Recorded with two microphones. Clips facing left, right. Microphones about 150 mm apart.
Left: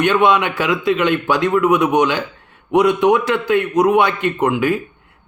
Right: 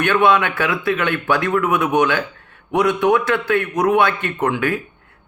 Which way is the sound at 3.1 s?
15° left (ahead or behind).